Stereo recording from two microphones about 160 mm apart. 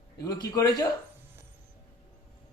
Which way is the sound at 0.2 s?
25° left (ahead or behind).